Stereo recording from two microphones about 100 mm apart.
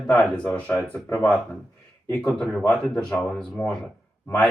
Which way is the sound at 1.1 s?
25° left (ahead or behind).